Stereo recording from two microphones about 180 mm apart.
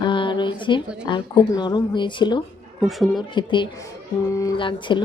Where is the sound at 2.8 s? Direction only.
Centre (ahead or behind).